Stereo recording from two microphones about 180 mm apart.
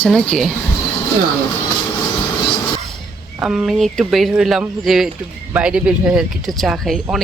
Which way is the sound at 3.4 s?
5° right (ahead or behind).